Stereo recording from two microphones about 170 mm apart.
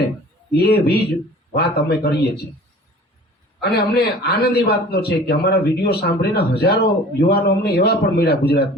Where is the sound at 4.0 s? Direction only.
65° left (ahead or behind).